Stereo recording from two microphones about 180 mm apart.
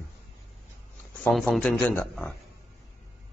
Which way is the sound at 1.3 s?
5° left (ahead or behind).